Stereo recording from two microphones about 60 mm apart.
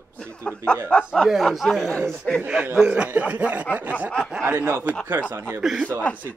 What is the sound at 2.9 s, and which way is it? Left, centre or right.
Speech, right.